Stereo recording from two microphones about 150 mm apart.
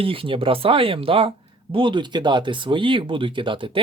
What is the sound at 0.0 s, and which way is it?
Speech, 35° right (ahead or behind).